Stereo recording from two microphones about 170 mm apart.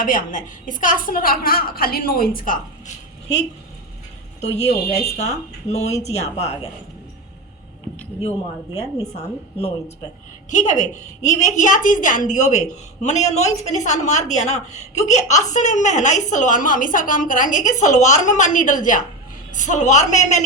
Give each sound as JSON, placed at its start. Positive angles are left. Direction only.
{"t": 0.0, "sound": "a woman's voice", "side_deg": 50}
{"t": 4.4, "sound": "speech", "side_deg": 40}
{"t": 9.1, "sound": "a woman's voice", "side_deg": 35}